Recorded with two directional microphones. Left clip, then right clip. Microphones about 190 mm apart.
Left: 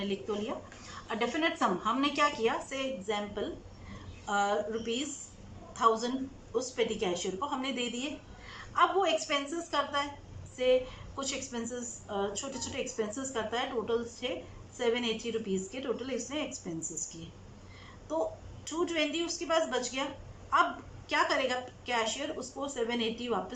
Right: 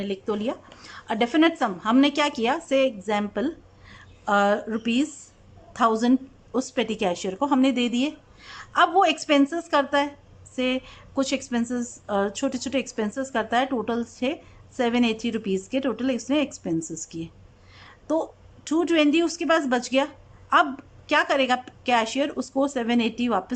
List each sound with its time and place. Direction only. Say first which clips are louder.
0.0 s a woman's voice: right 7 dB; 50° right (ahead or behind)
18.1 s a woman's voice: right 7 dB; 60° right (ahead or behind)